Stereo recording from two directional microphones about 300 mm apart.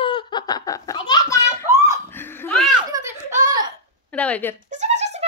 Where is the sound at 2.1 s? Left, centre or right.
Centre.